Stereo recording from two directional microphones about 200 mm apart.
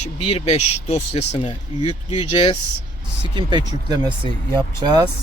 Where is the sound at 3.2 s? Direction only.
25° right (ahead or behind).